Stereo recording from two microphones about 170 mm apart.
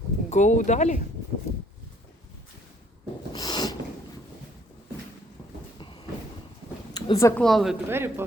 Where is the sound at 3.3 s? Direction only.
25° left (ahead or behind).